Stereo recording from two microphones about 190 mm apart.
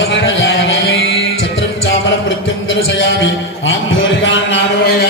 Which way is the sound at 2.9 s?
75° left (ahead or behind).